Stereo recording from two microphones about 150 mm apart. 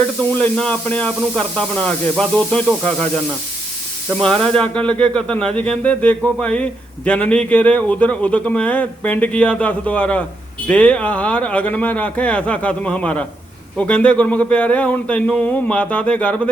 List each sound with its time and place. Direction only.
0.3 s a man's voice: 10° left (ahead or behind)
4.2 s a man's voice: 5° left (ahead or behind)